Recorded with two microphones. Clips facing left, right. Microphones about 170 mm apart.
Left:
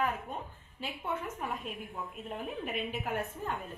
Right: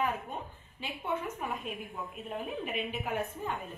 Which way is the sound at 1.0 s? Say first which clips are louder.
Right 2 dB; centre (ahead or behind).